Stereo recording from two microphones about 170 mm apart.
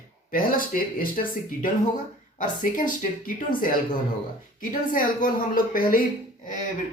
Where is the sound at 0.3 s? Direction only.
55° left (ahead or behind).